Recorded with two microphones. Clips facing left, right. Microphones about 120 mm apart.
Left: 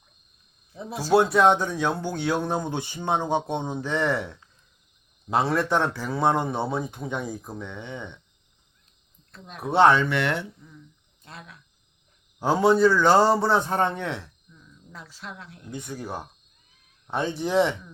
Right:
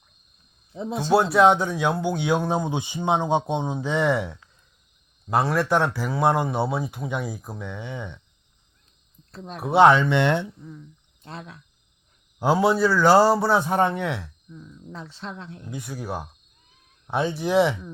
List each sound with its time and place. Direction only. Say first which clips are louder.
0.7 s speech: right 6 dB; 25° right (ahead or behind)
1.1 s speech: right 1 dB; 5° right (ahead or behind)
9.6 s speech: right 2 dB; 10° right (ahead or behind); by 11.5 s 30° right (ahead or behind)
12.4 s speech: left 1 dB; 10° right (ahead or behind)
14.5 s speech: right 7 dB; 25° right (ahead or behind)
15.7 s speech: right 1 dB; 5° right (ahead or behind)